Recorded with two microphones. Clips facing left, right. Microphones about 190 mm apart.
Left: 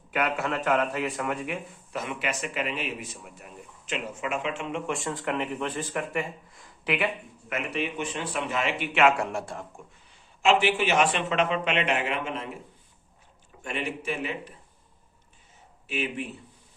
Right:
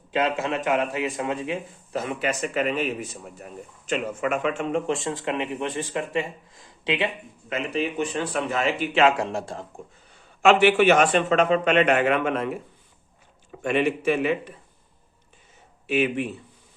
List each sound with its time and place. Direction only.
0.1 s speech: 25° right (ahead or behind)
1.9 s speech: 35° right (ahead or behind)
5.0 s speech: 20° right (ahead or behind)
7.5 s speech: 35° right (ahead or behind)
10.4 s a man's voice: 60° right (ahead or behind)
10.9 s speech: 45° right (ahead or behind); by 12.5 s 60° right (ahead or behind)
13.6 s speech: 80° right
15.9 s speech: 80° right